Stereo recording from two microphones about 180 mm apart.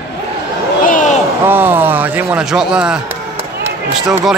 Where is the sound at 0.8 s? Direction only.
45° left (ahead or behind).